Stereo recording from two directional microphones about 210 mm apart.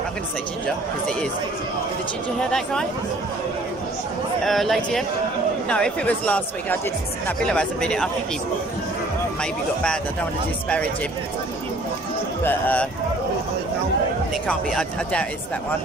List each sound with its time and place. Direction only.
2.5 s speech: 5° left (ahead or behind)
4.4 s speech: centre (ahead or behind)
9.4 s speech: 5° left (ahead or behind)
12.5 s speech: 10° left (ahead or behind)
14.4 s speech: 5° left (ahead or behind)